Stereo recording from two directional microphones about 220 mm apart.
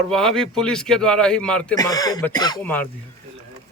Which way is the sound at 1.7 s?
15° left (ahead or behind).